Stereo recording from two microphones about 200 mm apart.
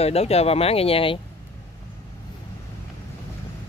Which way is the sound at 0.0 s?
30° left (ahead or behind).